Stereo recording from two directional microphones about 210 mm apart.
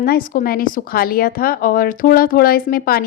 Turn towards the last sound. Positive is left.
turn(degrees=45)  # may be behind; listen again after turning